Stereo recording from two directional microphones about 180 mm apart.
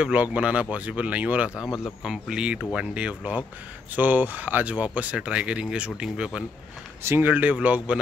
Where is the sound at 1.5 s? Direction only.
20° left (ahead or behind).